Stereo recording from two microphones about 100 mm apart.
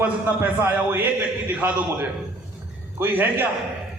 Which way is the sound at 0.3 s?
20° right (ahead or behind).